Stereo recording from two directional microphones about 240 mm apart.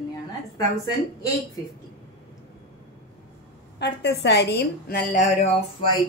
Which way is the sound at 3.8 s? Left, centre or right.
Left.